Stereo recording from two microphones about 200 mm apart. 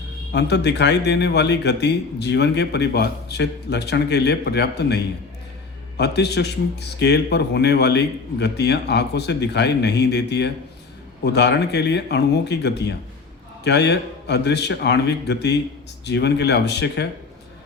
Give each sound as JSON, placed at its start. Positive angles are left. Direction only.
{"t": 0.3, "sound": "a man's voice", "side_deg": 60}
{"t": 6.0, "sound": "a man's voice", "side_deg": 55}